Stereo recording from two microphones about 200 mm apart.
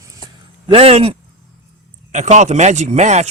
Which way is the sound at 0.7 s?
30° right (ahead or behind).